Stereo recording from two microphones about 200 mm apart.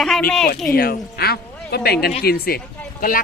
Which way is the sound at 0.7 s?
50° left (ahead or behind).